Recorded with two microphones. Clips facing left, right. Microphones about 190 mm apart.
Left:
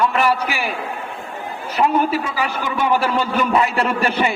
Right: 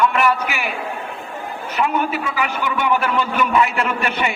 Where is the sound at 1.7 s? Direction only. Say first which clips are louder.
Left 3 dB; 35° left (ahead or behind).